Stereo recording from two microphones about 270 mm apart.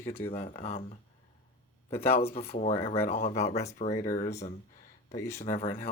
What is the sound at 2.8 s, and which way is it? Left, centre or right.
Speech, left.